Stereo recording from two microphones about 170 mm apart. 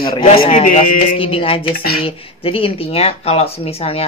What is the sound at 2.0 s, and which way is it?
Speech, 35° left (ahead or behind).